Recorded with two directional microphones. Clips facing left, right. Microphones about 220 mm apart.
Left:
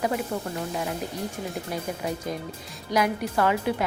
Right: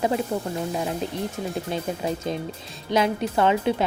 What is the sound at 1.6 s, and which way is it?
Speech, 25° right (ahead or behind).